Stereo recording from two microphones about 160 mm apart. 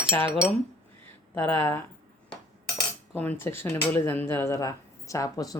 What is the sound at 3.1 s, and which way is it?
Speech, 10° left (ahead or behind).